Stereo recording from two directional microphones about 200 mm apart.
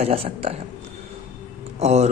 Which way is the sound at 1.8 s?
35° right (ahead or behind).